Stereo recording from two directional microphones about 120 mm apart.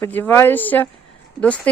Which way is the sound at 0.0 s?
20° left (ahead or behind).